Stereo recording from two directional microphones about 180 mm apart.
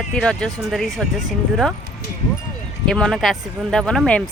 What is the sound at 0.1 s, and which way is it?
Speech, 5° left (ahead or behind).